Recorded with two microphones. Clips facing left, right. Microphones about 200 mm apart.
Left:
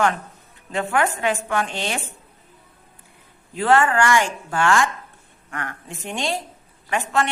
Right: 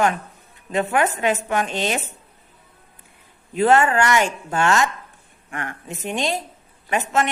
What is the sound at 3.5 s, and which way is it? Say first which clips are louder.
A woman's voice: right 2 dB; 20° right (ahead or behind).